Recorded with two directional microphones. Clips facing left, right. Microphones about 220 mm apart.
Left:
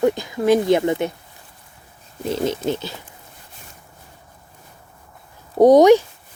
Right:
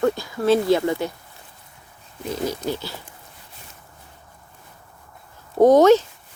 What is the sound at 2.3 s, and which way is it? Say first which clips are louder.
Speech: left 4 dB; 25° left (ahead or behind).